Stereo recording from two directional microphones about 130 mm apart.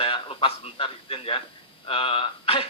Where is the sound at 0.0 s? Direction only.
40° left (ahead or behind).